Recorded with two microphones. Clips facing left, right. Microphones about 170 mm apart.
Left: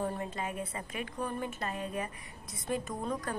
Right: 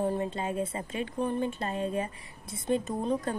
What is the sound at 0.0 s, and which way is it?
A woman's voice, 25° right (ahead or behind).